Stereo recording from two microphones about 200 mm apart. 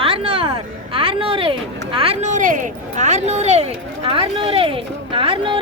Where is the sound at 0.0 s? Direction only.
30° right (ahead or behind).